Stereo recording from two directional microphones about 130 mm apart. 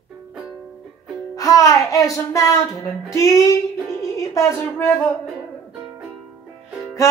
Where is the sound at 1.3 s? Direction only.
25° left (ahead or behind).